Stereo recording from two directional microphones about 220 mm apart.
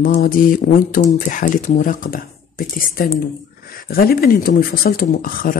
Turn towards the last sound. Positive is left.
turn(degrees=40)  # may be behind; listen again after turning